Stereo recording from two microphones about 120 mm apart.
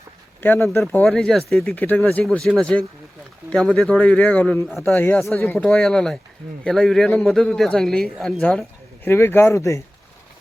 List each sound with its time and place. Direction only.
0.4 s speech: 20° left (ahead or behind)
1.0 s speech: 5° left (ahead or behind)
1.7 s a man's voice: 15° left (ahead or behind)
5.6 s speech: 5° left (ahead or behind)
9.0 s speech: 20° left (ahead or behind)